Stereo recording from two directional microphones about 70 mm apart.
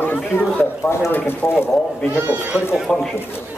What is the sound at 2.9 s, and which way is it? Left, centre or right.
Speech, centre.